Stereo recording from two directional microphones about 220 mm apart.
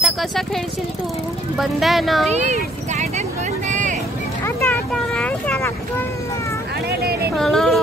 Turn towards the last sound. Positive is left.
turn(degrees=0)  # may be behind; listen again after turning